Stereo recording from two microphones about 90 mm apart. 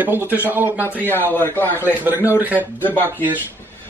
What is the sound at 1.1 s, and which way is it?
Speech, 25° left (ahead or behind).